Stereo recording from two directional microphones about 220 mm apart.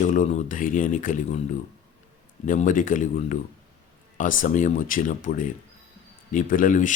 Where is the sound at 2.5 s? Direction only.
35° left (ahead or behind).